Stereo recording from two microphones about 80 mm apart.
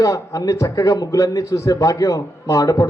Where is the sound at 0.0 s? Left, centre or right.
Left.